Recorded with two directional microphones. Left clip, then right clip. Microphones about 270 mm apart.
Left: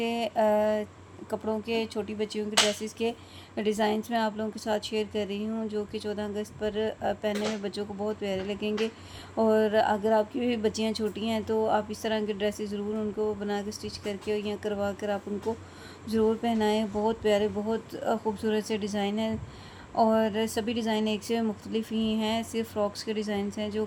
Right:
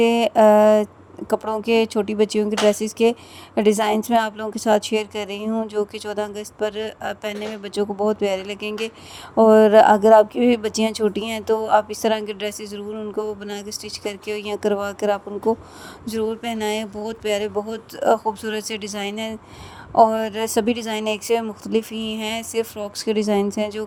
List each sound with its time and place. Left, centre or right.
0.0 s speech: right